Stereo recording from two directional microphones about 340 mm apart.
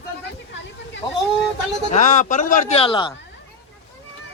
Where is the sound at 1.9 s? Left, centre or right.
Left.